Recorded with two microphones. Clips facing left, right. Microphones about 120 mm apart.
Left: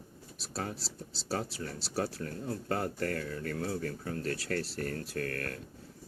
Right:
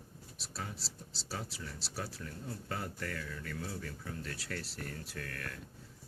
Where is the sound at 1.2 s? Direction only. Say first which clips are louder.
Left 8 dB; 55° left (ahead or behind).